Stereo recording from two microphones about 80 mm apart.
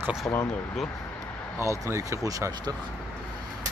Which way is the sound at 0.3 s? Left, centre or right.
Left.